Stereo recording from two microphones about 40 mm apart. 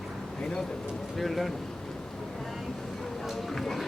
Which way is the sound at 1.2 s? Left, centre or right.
Centre.